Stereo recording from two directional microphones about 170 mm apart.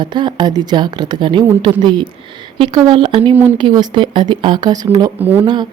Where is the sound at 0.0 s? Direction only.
25° right (ahead or behind).